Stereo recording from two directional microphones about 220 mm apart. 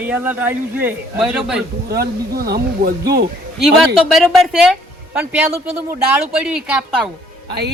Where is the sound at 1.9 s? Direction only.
45° right (ahead or behind).